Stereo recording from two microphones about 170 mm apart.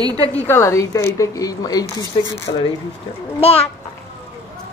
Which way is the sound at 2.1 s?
35° left (ahead or behind).